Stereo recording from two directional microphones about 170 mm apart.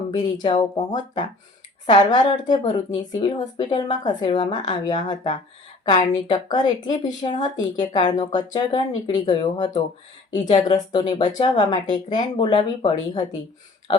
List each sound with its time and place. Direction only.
0.1 s speech: 25° left (ahead or behind)
10.3 s speech: 45° left (ahead or behind)
10.7 s speech: 25° left (ahead or behind)